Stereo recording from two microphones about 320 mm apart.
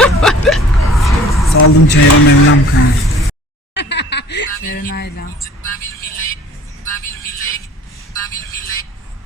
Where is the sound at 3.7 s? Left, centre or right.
Left.